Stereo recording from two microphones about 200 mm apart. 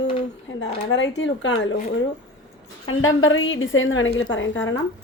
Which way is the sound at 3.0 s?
80° left.